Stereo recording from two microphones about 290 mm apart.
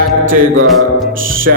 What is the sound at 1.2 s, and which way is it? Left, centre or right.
Music, right.